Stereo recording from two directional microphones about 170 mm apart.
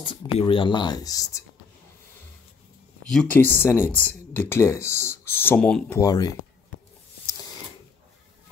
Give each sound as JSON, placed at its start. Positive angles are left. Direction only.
{"t": 0.4, "sound": "speech", "side_deg": 30}
{"t": 3.1, "sound": "speech", "side_deg": 5}
{"t": 5.9, "sound": "speech", "side_deg": 20}